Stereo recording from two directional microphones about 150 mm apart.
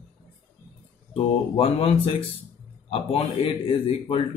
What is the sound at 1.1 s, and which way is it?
A man's voice, 40° left (ahead or behind).